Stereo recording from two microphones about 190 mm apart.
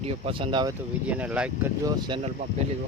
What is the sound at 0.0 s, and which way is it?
Speech, 30° right (ahead or behind).